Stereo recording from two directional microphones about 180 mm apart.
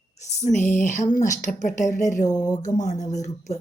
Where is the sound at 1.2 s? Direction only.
20° left (ahead or behind).